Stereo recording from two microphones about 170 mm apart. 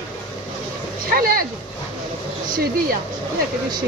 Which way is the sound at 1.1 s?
60° right (ahead or behind).